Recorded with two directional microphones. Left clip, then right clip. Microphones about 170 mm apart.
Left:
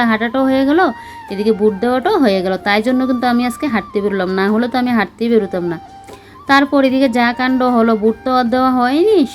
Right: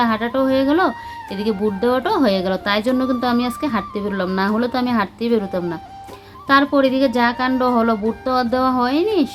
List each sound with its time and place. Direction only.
0.0 s a woman's voice: 20° left (ahead or behind)